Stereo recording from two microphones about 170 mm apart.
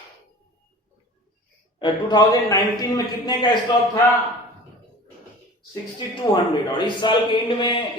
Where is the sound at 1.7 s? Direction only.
25° left (ahead or behind).